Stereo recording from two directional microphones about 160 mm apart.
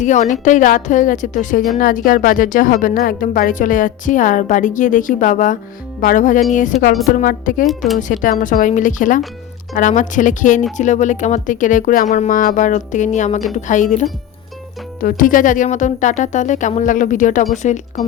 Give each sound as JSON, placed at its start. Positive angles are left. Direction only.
{"t": 0.0, "sound": "a woman's voice", "side_deg": 50}
{"t": 7.7, "sound": "a woman's voice", "side_deg": 0}
{"t": 7.9, "sound": "speech", "side_deg": 55}